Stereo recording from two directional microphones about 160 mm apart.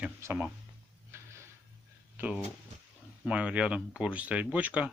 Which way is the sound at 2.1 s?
10° right (ahead or behind).